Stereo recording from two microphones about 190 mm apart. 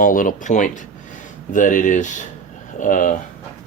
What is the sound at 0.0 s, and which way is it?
Speech, 45° left (ahead or behind).